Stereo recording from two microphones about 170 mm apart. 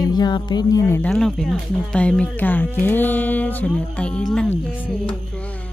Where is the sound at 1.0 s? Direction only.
5° left (ahead or behind).